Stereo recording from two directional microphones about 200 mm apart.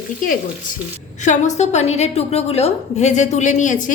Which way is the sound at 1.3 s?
35° left (ahead or behind).